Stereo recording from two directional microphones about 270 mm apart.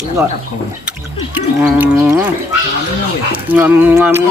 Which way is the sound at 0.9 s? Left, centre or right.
Centre.